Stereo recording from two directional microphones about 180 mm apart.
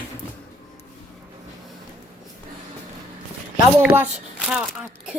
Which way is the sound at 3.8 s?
10° right (ahead or behind).